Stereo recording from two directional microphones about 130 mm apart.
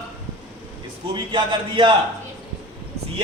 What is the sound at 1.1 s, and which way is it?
Speech, 40° right (ahead or behind).